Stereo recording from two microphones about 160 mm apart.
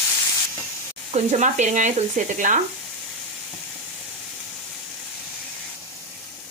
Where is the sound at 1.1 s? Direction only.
50° right (ahead or behind).